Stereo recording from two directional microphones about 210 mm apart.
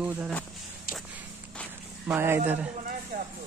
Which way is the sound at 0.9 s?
5° left (ahead or behind).